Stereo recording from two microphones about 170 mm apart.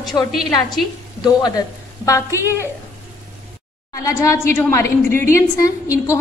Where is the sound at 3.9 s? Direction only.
20° left (ahead or behind).